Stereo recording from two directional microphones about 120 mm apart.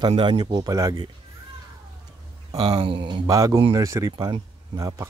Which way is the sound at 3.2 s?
30° right (ahead or behind).